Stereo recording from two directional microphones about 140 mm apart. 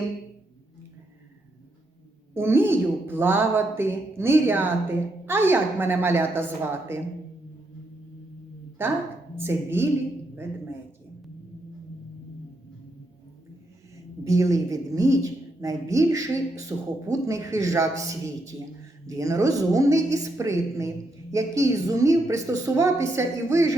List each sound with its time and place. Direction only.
2.3 s a woman's voice: 15° right (ahead or behind)
8.8 s a woman's voice: 15° right (ahead or behind)
13.9 s a woman's voice: 20° right (ahead or behind)